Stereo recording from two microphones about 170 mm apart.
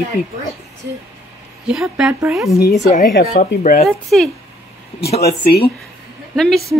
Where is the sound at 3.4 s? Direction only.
45° left (ahead or behind).